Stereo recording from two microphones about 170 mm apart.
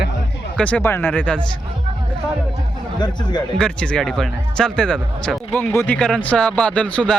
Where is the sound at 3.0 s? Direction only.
25° left (ahead or behind).